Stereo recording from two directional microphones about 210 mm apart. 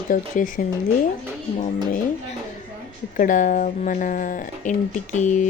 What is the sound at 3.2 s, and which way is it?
Speech, 40° left (ahead or behind).